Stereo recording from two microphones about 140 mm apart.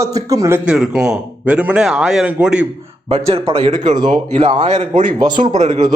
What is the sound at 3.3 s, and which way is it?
Speech, 45° right (ahead or behind).